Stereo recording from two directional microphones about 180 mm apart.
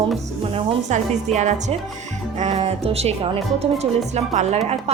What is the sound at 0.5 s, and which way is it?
Music, 40° right (ahead or behind).